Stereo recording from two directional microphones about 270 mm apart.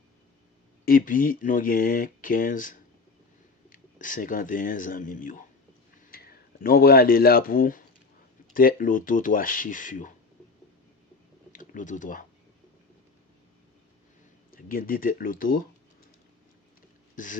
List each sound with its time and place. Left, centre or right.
0.9 s speech: left
11.5 s speech: left
14.5 s speech: left
17.2 s speech: left